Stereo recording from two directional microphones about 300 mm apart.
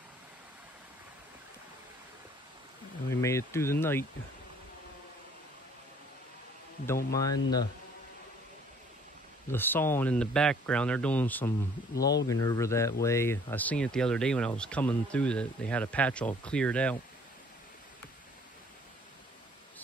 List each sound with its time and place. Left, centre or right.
3.2 s speech: centre
7.2 s speech: centre
9.5 s speech: centre
11.9 s speech: left
12.3 s speech: centre